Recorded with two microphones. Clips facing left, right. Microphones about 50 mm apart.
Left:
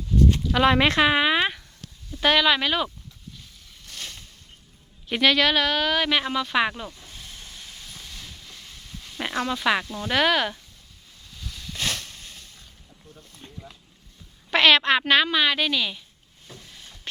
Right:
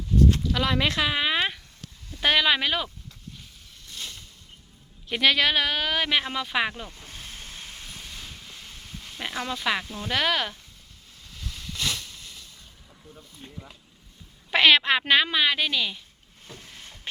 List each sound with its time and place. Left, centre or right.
0.5 s speech: left
1.2 s speech: centre
2.2 s a woman's voice: centre
5.0 s a woman's voice: centre
5.3 s speech: centre
6.7 s speech: centre
7.0 s steam: right
9.1 s a sound: centre
9.4 s a woman's voice: centre
11.7 s a sound: left
13.4 s a sound: centre
14.5 s a woman's voice: centre
16.5 s a sound: right